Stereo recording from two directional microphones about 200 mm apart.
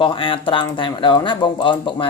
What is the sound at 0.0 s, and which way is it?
Speech, 25° left (ahead or behind).